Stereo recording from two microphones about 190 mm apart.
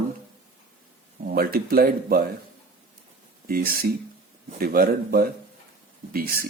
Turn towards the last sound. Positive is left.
turn(degrees=-50)  # may be behind; listen again after turning